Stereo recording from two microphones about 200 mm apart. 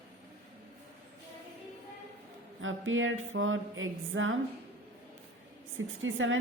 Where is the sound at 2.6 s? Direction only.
75° right (ahead or behind).